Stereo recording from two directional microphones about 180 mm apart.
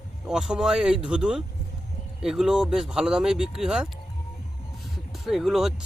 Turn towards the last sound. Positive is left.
turn(degrees=0)  # may be behind; listen again after turning